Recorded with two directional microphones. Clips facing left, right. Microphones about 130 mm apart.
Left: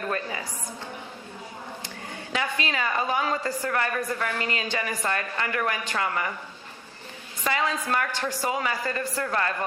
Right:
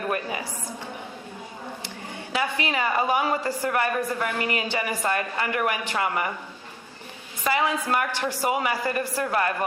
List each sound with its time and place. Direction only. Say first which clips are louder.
0.1 s a sound: right 2 dB; 15° right (ahead or behind)
2.1 s a woman's voice: right 2 dB; 15° right (ahead or behind)
7.4 s a woman's voice: right 3 dB; 10° right (ahead or behind)